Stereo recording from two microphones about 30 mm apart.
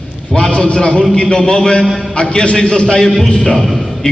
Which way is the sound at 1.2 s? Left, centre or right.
Left.